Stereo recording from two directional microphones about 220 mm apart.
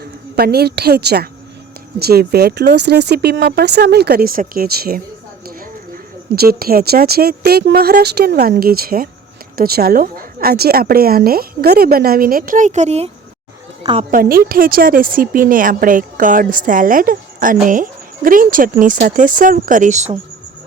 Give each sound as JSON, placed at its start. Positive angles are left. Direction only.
{"t": 0.3, "sound": "a woman's voice", "side_deg": -45}
{"t": 6.3, "sound": "a woman's voice", "side_deg": -45}
{"t": 14.1, "sound": "a woman's voice", "side_deg": -40}